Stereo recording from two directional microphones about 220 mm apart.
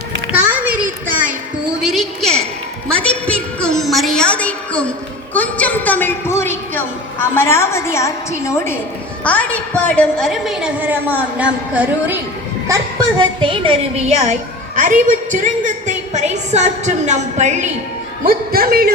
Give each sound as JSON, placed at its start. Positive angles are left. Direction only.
{"t": 0.3, "sound": "a sound", "side_deg": -5}
{"t": 2.9, "sound": "music", "side_deg": 5}
{"t": 5.3, "sound": "a sound", "side_deg": 5}
{"t": 9.2, "sound": "a woman's voice", "side_deg": 5}
{"t": 12.6, "sound": "a woman's voice", "side_deg": -20}
{"t": 18.3, "sound": "a man's voice", "side_deg": -45}